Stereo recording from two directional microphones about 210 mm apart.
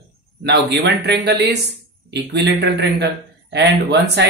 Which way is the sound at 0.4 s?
55° right (ahead or behind).